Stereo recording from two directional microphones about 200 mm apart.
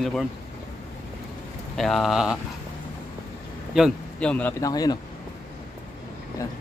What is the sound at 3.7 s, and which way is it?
Speech, centre (ahead or behind).